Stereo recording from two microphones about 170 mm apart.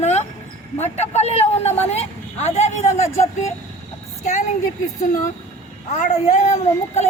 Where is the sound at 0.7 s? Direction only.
40° left (ahead or behind).